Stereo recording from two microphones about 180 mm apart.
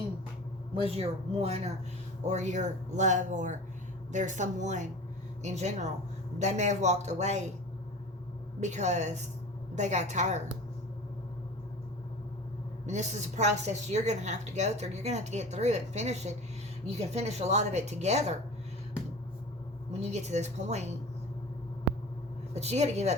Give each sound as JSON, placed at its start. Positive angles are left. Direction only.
{"t": 0.8, "sound": "a woman's voice", "side_deg": -35}
{"t": 8.6, "sound": "a woman's voice", "side_deg": -40}
{"t": 12.8, "sound": "a woman's voice", "side_deg": -40}
{"t": 19.9, "sound": "a woman's voice", "side_deg": -35}
{"t": 22.5, "sound": "a woman's voice", "side_deg": -40}